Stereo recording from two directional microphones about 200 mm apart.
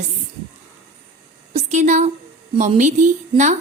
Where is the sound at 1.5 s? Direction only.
35° right (ahead or behind).